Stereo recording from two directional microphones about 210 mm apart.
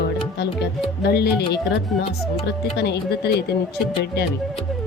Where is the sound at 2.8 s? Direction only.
50° left (ahead or behind).